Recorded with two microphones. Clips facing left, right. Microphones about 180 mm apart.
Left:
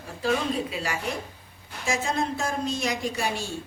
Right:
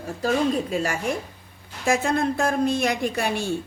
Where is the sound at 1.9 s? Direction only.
55° right (ahead or behind).